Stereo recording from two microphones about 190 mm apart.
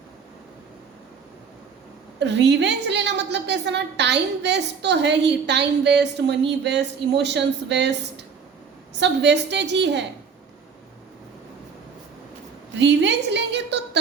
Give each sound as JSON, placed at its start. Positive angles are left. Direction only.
{"t": 2.1, "sound": "a woman's voice", "side_deg": -65}
{"t": 12.8, "sound": "a woman's voice", "side_deg": -65}